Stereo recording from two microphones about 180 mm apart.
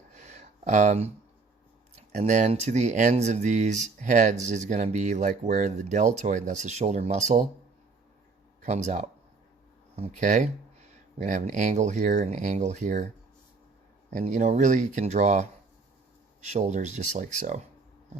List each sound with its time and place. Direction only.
0.2 s a sound: 40° right (ahead or behind)
2.0 s speech: 40° right (ahead or behind)
8.6 s speech: 40° right (ahead or behind)
14.1 s speech: 40° right (ahead or behind)